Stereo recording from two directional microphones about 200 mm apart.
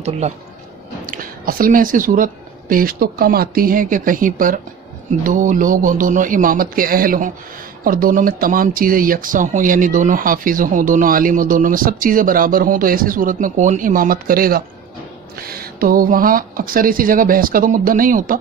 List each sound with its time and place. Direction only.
1.0 s speech: 45° right (ahead or behind)